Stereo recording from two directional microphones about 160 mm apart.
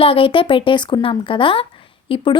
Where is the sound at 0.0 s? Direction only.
35° left (ahead or behind).